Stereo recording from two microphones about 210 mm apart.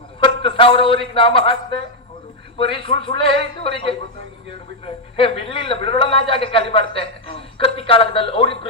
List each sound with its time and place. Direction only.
0.2 s a man's voice: 25° left (ahead or behind)
5.1 s a man's voice: 25° left (ahead or behind)